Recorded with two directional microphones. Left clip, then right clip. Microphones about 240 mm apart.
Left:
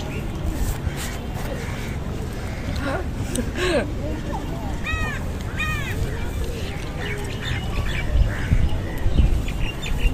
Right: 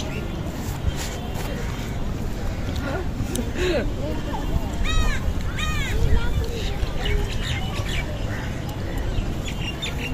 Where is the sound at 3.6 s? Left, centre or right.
Centre.